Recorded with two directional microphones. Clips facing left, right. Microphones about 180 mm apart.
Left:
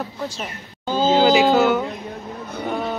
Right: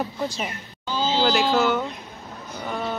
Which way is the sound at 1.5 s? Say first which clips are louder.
Left 4 dB; centre (ahead or behind).